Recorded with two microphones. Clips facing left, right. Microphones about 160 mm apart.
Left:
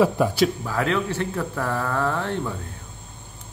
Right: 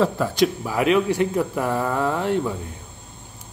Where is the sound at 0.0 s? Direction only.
10° left (ahead or behind).